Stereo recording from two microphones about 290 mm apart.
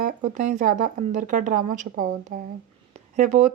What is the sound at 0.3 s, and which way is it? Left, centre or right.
A woman's voice, right.